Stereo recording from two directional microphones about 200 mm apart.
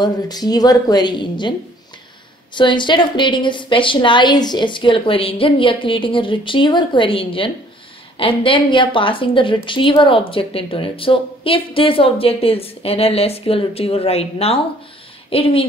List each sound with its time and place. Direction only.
0.0 s a woman's voice: 20° left (ahead or behind)
2.5 s a woman's voice: 25° left (ahead or behind)